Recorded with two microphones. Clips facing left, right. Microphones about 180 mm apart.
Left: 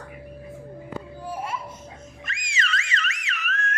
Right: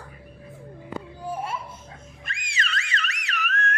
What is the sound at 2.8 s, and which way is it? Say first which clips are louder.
Car alarm: left 1 dB; 65° right (ahead or behind).